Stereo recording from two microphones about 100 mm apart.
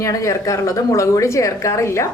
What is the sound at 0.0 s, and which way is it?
A woman's voice, 35° left (ahead or behind).